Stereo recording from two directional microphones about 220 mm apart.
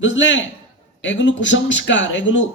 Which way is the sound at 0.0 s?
55° left (ahead or behind).